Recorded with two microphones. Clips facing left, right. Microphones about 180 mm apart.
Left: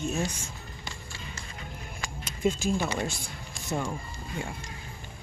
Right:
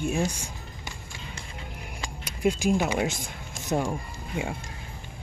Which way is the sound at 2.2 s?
10° right (ahead or behind).